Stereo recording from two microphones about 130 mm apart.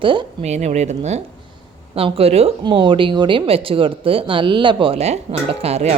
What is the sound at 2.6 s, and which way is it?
Speech, 40° right (ahead or behind).